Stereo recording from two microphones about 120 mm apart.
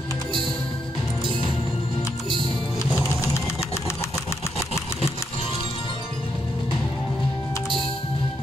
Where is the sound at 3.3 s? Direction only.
25° left (ahead or behind).